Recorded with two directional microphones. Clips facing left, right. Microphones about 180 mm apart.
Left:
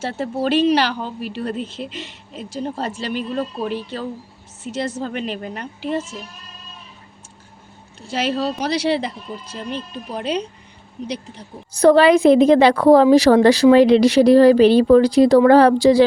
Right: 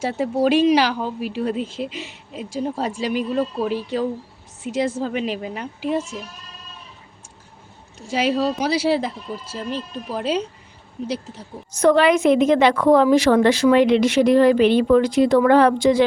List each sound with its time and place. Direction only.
0.0 s speech: 10° right (ahead or behind)
7.9 s speech: 10° right (ahead or behind)
11.7 s a woman's voice: 35° left (ahead or behind)